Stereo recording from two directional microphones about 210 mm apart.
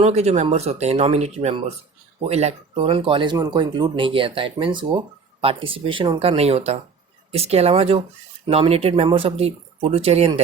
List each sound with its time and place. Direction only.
0.0 s speech: 30° right (ahead or behind)